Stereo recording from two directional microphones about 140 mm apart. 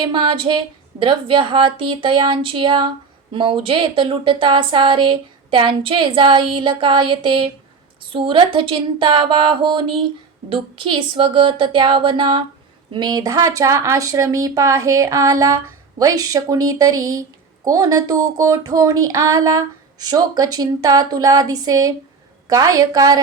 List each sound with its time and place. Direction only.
0.0 s speech: 35° right (ahead or behind)